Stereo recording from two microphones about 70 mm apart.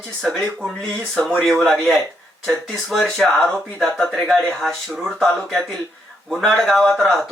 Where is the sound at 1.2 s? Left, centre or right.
Centre.